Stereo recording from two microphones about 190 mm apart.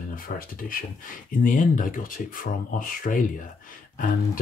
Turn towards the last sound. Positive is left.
turn(degrees=50)  # may be behind; listen again after turning